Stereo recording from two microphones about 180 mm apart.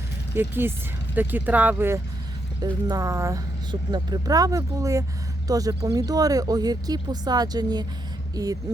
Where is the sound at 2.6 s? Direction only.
20° right (ahead or behind).